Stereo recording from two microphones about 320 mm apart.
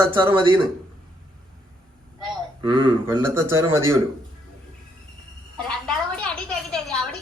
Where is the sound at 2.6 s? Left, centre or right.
Centre.